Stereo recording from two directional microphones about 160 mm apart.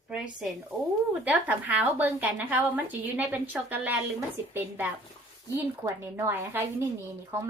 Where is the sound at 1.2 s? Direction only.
10° right (ahead or behind).